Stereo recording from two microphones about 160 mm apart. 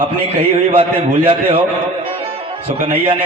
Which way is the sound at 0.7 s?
35° right (ahead or behind).